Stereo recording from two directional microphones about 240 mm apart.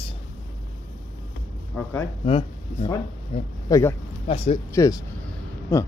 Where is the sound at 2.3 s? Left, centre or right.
Left.